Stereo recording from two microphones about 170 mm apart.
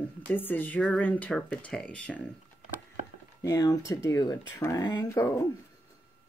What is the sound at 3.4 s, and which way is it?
Speech, 20° left (ahead or behind).